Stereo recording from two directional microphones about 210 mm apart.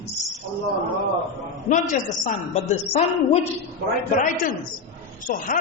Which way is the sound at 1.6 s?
40° left (ahead or behind).